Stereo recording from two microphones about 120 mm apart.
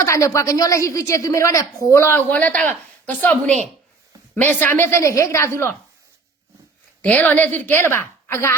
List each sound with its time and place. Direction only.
0.0 s a woman's voice: 25° left (ahead or behind)
7.0 s a woman's voice: 15° left (ahead or behind)